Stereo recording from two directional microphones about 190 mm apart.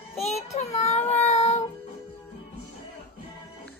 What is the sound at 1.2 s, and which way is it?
Child singing, 35° left (ahead or behind).